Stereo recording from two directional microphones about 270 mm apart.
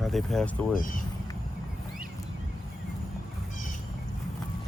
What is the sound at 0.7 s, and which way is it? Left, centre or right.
Speech, left.